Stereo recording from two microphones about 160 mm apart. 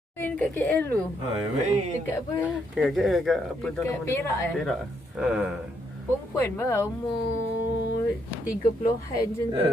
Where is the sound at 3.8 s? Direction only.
20° left (ahead or behind).